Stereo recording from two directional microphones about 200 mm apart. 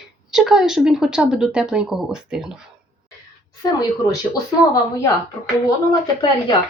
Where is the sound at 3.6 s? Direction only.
20° left (ahead or behind).